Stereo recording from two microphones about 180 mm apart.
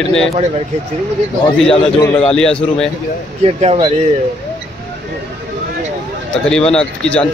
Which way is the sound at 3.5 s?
35° right (ahead or behind).